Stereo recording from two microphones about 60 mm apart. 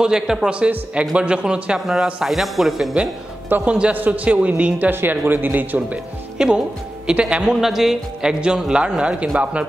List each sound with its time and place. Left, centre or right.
0.0 s speech: centre
2.2 s speech: centre
3.6 s a man's voice: centre
5.8 s speech: centre